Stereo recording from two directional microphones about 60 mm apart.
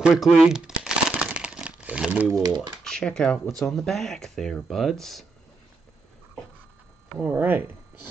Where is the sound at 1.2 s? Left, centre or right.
Centre.